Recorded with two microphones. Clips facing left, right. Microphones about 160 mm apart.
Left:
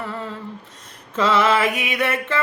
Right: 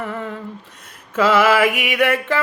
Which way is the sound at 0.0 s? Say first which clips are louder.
Right 3 dB; 20° right (ahead or behind).